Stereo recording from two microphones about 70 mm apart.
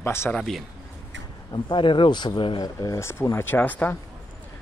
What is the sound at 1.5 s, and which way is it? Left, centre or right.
Speech, left.